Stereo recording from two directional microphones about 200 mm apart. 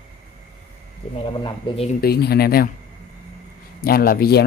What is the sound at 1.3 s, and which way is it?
Speech, 25° left (ahead or behind).